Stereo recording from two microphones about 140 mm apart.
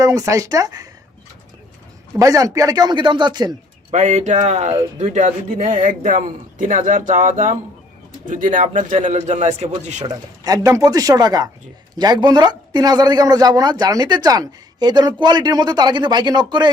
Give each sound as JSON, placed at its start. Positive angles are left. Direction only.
{"t": 0.0, "sound": "a man's voice", "side_deg": -25}
{"t": 2.1, "sound": "a man's voice", "side_deg": -25}
{"t": 3.9, "sound": "speech", "side_deg": -55}
{"t": 10.4, "sound": "a man's voice", "side_deg": -25}